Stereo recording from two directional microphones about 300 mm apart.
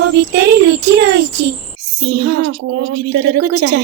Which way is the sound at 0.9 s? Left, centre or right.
Right.